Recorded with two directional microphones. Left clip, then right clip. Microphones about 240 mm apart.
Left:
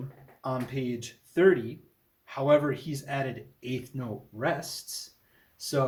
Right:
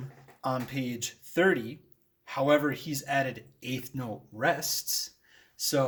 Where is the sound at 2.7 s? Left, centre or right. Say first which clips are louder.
Right 4 dB; right.